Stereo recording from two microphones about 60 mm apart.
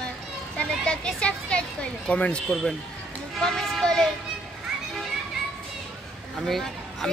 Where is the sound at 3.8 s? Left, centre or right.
Centre.